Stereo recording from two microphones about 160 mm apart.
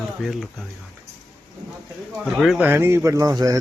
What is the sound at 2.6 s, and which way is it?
Speech, 15° right (ahead or behind).